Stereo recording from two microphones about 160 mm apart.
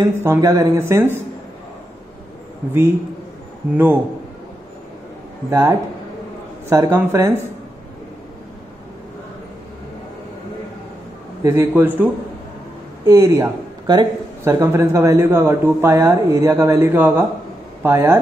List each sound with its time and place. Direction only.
0.0 s speech: 15° right (ahead or behind)
3.7 s speech: 10° right (ahead or behind)
5.5 s speech: 15° right (ahead or behind)
11.4 s speech: 15° right (ahead or behind)